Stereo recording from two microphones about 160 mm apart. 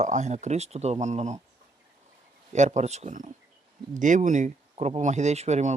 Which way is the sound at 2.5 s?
45° right (ahead or behind).